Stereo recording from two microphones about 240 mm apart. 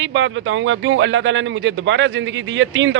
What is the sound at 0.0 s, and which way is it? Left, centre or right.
A man's voice, right.